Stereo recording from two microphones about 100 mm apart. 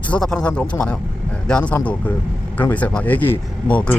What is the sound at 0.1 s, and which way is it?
Speech, 5° left (ahead or behind).